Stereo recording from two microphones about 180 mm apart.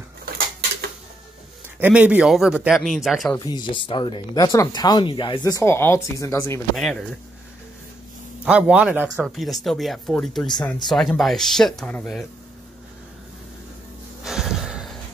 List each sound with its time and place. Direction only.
1.8 s speech: 5° right (ahead or behind)
3.3 s speech: 25° left (ahead or behind)
6.8 s speech: centre (ahead or behind)
8.5 s speech: 5° right (ahead or behind)
14.2 s a sound: centre (ahead or behind)